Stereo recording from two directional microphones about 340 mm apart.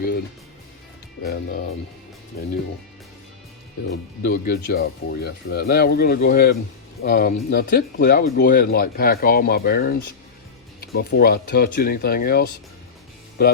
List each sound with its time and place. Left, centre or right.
1.2 s speech: left
3.8 s speech: left